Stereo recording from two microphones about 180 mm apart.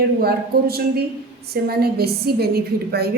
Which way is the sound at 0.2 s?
60° right (ahead or behind).